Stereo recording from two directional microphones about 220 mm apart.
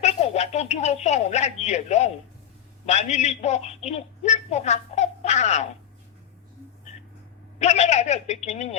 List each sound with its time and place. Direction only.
0.0 s a woman's voice: 30° left (ahead or behind)
7.6 s a man's voice: 30° left (ahead or behind)